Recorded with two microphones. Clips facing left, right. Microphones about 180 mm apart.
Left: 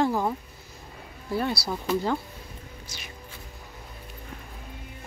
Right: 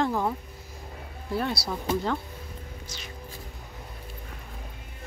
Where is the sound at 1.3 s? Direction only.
Centre (ahead or behind).